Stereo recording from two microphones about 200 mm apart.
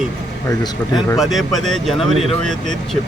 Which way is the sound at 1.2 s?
Centre (ahead or behind).